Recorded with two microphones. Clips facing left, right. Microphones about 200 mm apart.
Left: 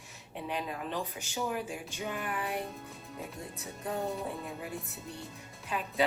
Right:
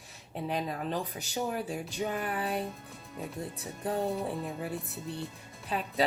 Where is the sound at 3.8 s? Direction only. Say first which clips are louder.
Right 4 dB; 30° right (ahead or behind).